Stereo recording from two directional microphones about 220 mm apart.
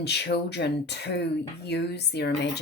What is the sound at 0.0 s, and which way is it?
Speech, 50° left (ahead or behind).